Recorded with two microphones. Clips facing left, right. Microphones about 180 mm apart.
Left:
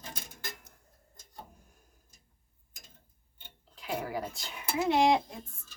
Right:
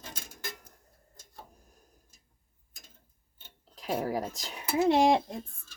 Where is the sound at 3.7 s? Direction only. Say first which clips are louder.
Right 4 dB; 40° right (ahead or behind).